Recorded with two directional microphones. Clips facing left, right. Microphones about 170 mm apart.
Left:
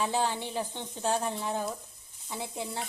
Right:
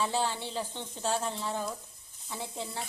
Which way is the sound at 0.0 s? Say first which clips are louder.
Left 1 dB; 15° left (ahead or behind).